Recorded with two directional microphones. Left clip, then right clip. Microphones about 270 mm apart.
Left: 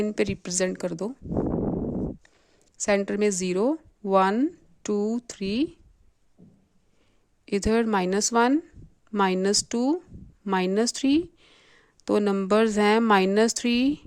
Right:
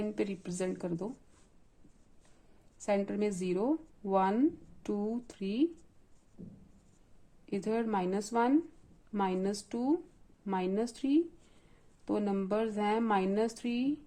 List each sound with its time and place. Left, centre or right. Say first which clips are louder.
0.0 s a woman's voice: left 9 dB; left
2.7 s a woman's voice: left 8 dB; left
7.4 s a woman's voice: left 10 dB; left